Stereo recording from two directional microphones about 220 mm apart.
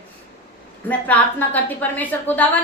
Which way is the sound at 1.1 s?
5° left (ahead or behind).